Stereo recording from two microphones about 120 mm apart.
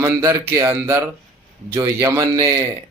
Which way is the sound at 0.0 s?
25° right (ahead or behind).